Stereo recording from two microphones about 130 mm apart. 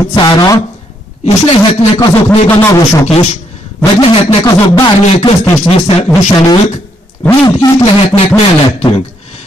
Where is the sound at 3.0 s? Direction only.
55° left (ahead or behind).